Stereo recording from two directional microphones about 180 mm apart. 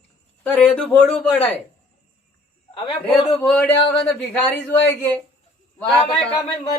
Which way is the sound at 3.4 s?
5° left (ahead or behind).